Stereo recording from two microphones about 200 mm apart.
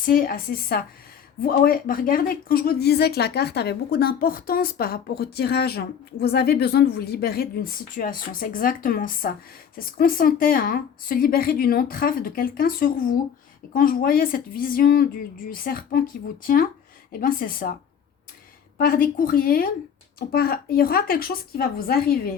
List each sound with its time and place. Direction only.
0.0 s a woman's voice: 45° left (ahead or behind)
18.8 s a woman's voice: 45° left (ahead or behind)